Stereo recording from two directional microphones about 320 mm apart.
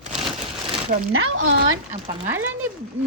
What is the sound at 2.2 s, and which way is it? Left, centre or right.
Speech, centre.